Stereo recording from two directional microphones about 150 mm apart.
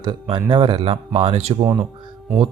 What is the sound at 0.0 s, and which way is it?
Speech, 30° right (ahead or behind).